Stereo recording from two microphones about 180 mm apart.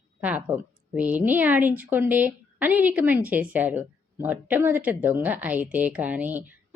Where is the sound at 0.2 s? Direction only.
10° right (ahead or behind).